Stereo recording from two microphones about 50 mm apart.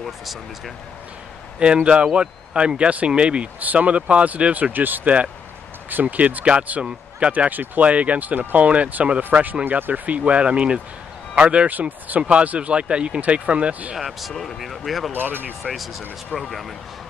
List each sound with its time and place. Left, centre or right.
0.0 s speech: centre
1.6 s speech: right
3.5 s speech: right
4.7 s speech: right
7.4 s speech: right
13.9 s speech: centre
15.1 s speech: right
15.6 s speech: centre